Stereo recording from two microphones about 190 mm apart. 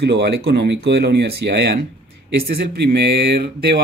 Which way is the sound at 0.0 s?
60° right (ahead or behind).